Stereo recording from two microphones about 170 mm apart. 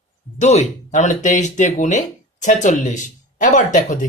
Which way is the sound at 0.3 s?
45° left (ahead or behind).